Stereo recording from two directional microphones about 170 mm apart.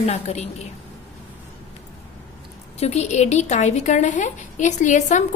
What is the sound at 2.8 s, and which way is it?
A woman's voice, 40° left (ahead or behind).